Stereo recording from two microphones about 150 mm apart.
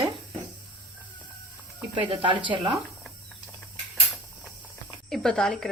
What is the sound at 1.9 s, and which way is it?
Speech, 35° right (ahead or behind).